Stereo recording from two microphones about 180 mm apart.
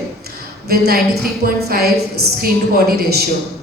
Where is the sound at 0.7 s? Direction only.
60° right (ahead or behind).